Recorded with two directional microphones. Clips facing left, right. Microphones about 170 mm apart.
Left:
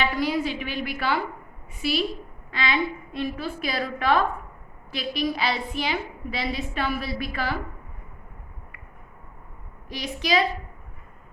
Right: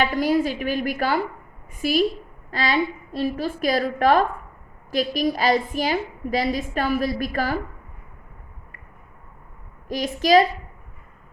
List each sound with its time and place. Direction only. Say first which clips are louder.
0.0 s a woman's voice: right 5 dB; 45° right (ahead or behind)
9.9 s a woman's voice: right 8 dB; 45° right (ahead or behind)